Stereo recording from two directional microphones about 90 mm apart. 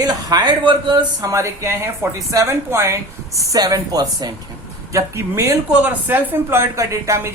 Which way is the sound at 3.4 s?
40° right (ahead or behind).